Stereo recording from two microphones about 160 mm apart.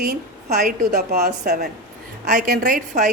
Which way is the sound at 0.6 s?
65° right (ahead or behind).